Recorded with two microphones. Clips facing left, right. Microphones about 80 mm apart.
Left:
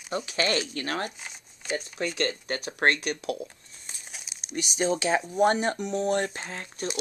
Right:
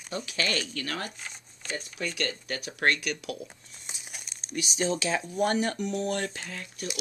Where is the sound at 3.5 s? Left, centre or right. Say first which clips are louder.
Right 1 dB; centre.